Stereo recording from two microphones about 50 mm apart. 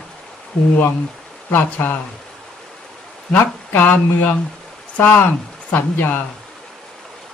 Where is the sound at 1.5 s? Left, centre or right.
Left.